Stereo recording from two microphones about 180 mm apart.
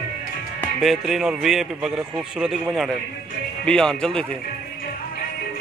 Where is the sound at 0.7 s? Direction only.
Centre (ahead or behind).